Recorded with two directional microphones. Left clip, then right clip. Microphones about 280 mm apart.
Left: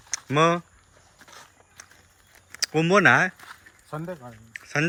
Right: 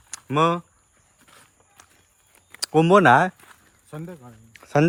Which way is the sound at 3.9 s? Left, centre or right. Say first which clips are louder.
Left 4 dB; centre.